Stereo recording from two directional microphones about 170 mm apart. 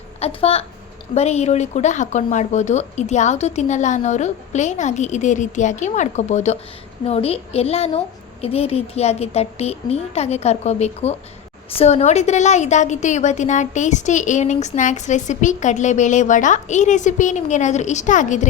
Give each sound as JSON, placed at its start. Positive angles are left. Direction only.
{"t": 0.2, "sound": "a woman's voice", "side_deg": 35}